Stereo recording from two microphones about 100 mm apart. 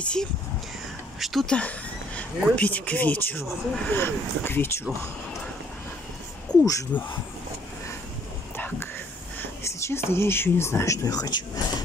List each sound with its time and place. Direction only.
0.0 s speech: 10° left (ahead or behind)
1.2 s a sound: centre (ahead or behind)
2.5 s speech: 15° left (ahead or behind)
6.5 s speech: 40° left (ahead or behind)
6.9 s speech: 15° left (ahead or behind)
8.5 s whispering: 20° left (ahead or behind)
9.4 s speech: 30° left (ahead or behind)